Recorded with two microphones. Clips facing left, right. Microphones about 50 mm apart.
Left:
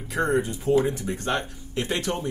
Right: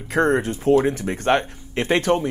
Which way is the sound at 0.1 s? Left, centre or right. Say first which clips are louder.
Right 5 dB; right.